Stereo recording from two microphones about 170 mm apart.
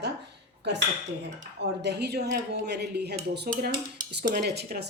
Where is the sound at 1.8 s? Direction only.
75° right (ahead or behind).